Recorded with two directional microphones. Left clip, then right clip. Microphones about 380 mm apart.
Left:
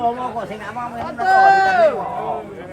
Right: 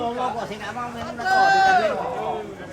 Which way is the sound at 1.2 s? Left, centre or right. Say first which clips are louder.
Left 5 dB; centre.